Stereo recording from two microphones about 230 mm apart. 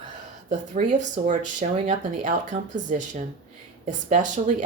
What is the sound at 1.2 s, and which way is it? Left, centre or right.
Speech, right.